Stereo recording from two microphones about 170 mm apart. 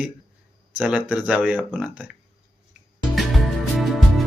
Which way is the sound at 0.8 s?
10° right (ahead or behind).